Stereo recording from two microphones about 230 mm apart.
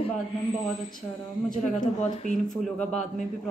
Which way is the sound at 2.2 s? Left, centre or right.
Left.